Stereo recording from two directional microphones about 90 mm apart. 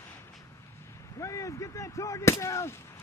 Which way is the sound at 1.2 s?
35° left (ahead or behind).